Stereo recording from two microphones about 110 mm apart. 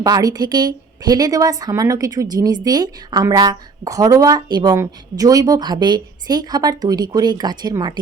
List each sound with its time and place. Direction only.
0.0 s a woman's voice: 35° right (ahead or behind)